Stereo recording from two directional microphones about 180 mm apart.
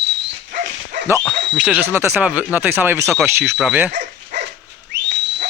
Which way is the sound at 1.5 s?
5° right (ahead or behind).